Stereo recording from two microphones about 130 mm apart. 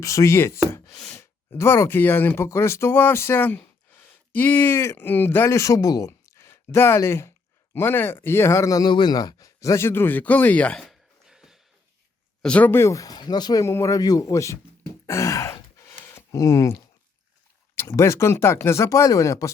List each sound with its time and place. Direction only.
0.0 s speech: 25° left (ahead or behind)
0.7 s a sound: 25° left (ahead or behind)
1.1 s speech: 20° left (ahead or behind); by 11.6 s 5° right (ahead or behind)
12.4 s speech: 10° left (ahead or behind)
15.0 s sigh: 25° left (ahead or behind)
17.7 s speech: 20° left (ahead or behind)